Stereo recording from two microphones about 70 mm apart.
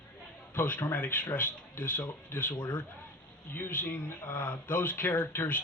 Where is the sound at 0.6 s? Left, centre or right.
Left.